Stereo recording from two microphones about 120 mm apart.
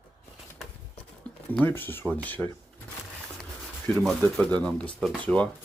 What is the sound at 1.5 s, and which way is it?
Speech, 15° left (ahead or behind).